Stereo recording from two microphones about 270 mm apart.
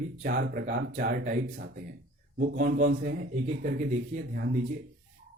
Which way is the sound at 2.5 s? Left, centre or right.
Right.